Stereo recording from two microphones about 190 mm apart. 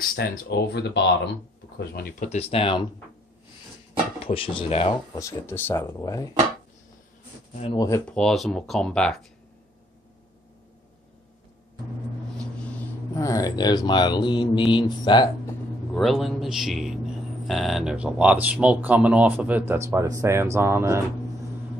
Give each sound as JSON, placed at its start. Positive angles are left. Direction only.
{"t": 0.1, "sound": "speech", "side_deg": 60}
{"t": 1.9, "sound": "speech", "side_deg": 50}
{"t": 2.2, "sound": "speech", "side_deg": 35}
{"t": 4.3, "sound": "speech", "side_deg": 30}
{"t": 5.1, "sound": "speech", "side_deg": 15}
{"t": 7.7, "sound": "speech", "side_deg": 20}
{"t": 8.1, "sound": "a man's voice", "side_deg": 5}
{"t": 13.1, "sound": "speech", "side_deg": 15}
{"t": 15.9, "sound": "a man's voice", "side_deg": 0}